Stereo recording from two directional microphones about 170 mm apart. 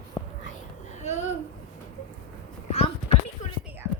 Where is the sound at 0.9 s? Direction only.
45° left (ahead or behind).